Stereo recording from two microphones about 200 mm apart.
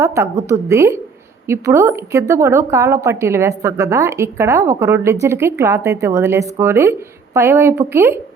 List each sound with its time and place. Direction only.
0.0 s speech: 15° right (ahead or behind)